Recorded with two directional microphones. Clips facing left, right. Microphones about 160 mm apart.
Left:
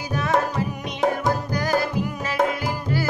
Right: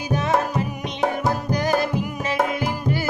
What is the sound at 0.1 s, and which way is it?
Music, 20° right (ahead or behind).